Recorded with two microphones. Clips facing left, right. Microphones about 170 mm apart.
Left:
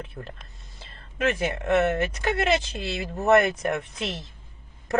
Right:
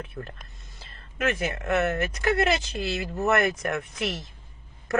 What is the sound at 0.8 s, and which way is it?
Speech, 30° left (ahead or behind).